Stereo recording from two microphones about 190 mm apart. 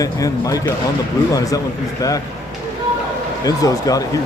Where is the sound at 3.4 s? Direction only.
20° left (ahead or behind).